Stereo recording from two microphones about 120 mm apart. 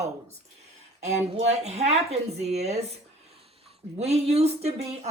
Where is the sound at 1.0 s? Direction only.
70° right (ahead or behind).